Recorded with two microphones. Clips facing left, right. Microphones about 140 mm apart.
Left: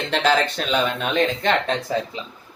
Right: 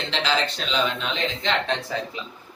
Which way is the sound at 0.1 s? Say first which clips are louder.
Left 6 dB; 50° left (ahead or behind).